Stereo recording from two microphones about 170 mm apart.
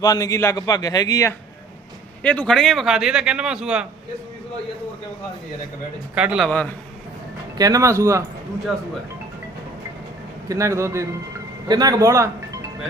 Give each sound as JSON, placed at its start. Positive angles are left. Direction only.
{"t": 0.0, "sound": "a man's voice", "side_deg": 20}
{"t": 2.2, "sound": "a man's voice", "side_deg": 10}
{"t": 6.1, "sound": "speech", "side_deg": -5}
{"t": 6.5, "sound": "a man's voice", "side_deg": 5}
{"t": 7.6, "sound": "speech", "side_deg": -20}
{"t": 8.7, "sound": "a man's voice", "side_deg": 0}
{"t": 10.5, "sound": "speech", "side_deg": -15}